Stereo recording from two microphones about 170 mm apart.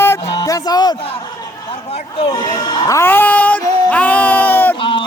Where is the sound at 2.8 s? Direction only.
15° left (ahead or behind).